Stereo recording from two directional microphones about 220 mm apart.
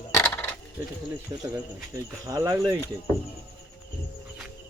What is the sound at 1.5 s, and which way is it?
Speech, 15° right (ahead or behind).